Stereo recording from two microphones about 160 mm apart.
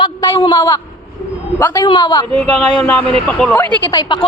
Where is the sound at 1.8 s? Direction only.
30° left (ahead or behind).